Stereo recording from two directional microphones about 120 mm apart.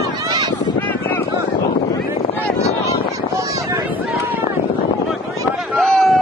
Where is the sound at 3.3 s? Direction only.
25° right (ahead or behind).